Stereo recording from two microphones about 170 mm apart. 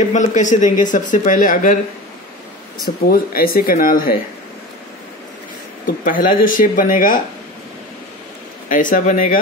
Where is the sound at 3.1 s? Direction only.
60° left (ahead or behind).